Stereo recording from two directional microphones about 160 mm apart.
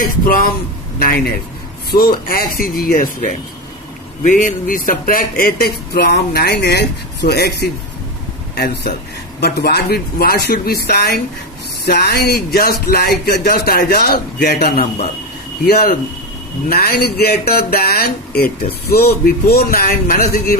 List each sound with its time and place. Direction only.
0.9 s speech: 75° left (ahead or behind)